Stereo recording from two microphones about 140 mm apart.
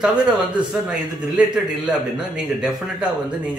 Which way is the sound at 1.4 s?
10° right (ahead or behind).